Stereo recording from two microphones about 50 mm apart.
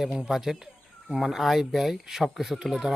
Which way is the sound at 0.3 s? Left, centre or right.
Centre.